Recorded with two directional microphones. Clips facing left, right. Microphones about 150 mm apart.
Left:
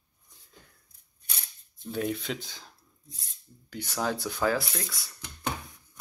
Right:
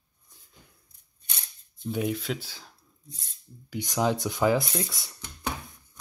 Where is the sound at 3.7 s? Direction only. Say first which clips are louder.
Right 5 dB; 15° right (ahead or behind).